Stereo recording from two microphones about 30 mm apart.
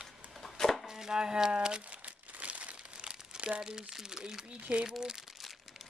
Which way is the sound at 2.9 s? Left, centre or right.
Right.